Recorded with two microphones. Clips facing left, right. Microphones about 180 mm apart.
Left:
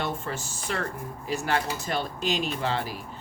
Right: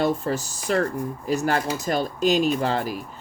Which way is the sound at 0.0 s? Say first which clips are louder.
Right 8 dB; 40° right (ahead or behind).